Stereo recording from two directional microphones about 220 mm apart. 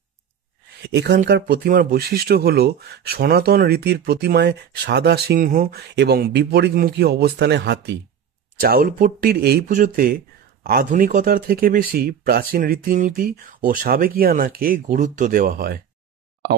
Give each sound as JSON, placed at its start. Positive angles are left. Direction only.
{"t": 0.8, "sound": "speech", "side_deg": -50}